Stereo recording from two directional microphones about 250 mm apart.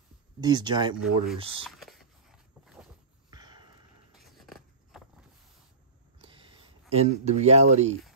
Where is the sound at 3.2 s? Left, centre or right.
Centre.